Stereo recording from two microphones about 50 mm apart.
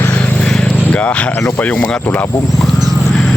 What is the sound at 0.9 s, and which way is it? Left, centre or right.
Speech, left.